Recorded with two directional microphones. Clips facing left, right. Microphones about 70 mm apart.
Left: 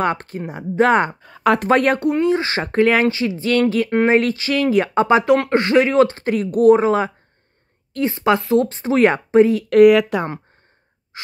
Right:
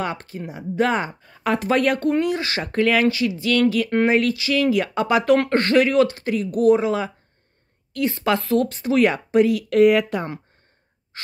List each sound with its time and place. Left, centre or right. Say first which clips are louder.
0.0 s speech: left 6 dB; left
1.2 s speech: left 6 dB; left
1.6 s speech: left 1 dB; left
2.2 s speech: left 5 dB; left
5.5 s speech: left 2 dB; centre; by 6.3 s left
6.3 s speech: left 4 dB; left
7.9 s speech: left 4 dB; left
9.8 s speech: left 5 dB; left
11.1 s gasp: left 2 dB; centre